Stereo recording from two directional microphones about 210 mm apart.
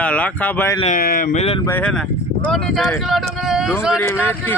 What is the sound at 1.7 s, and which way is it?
A man's voice, 5° left (ahead or behind).